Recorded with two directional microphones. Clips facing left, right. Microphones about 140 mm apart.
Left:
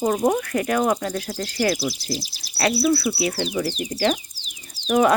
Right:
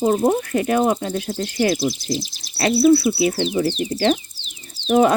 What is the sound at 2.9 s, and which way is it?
Speech, 25° right (ahead or behind).